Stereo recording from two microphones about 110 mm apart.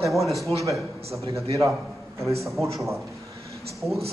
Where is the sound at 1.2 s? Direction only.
30° right (ahead or behind).